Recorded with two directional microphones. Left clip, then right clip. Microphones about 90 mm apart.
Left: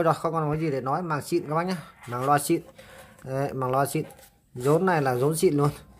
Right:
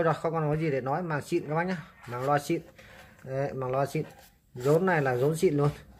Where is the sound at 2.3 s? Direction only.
60° left (ahead or behind).